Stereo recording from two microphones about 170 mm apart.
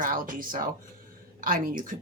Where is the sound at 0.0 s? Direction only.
55° right (ahead or behind).